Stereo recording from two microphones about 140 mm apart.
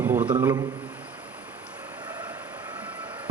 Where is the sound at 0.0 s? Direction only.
10° right (ahead or behind).